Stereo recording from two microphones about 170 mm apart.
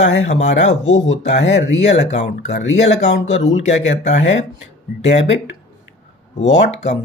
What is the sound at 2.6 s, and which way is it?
Speech, 90° left.